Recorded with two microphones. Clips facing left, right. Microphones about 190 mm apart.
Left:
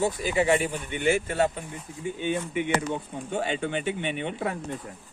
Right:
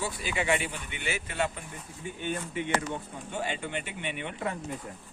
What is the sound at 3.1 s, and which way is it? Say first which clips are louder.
Speech: left 5 dB; 25° left (ahead or behind).